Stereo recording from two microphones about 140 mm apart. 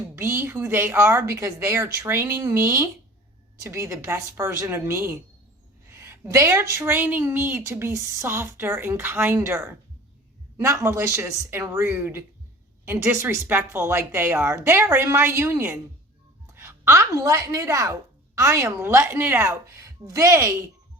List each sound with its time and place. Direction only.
0.2 s a woman's voice: 15° right (ahead or behind)